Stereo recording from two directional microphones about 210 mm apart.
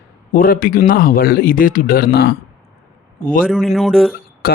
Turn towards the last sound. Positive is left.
turn(degrees=45)  # may be behind; listen again after turning